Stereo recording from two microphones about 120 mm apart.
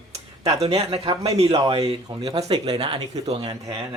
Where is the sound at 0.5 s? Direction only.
55° right (ahead or behind).